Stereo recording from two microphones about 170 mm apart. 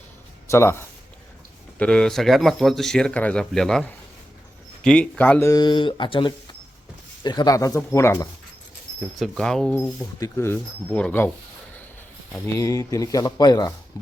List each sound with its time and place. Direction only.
0.5 s speech: 15° left (ahead or behind)
9.1 s speech: centre (ahead or behind)
10.2 s speech: 20° left (ahead or behind)
12.5 s speech: 20° left (ahead or behind)